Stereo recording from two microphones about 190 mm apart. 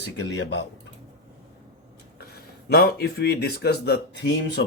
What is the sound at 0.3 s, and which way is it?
Speech, 65° left (ahead or behind).